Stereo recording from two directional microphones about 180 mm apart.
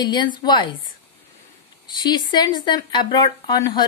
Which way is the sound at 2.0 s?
25° left (ahead or behind).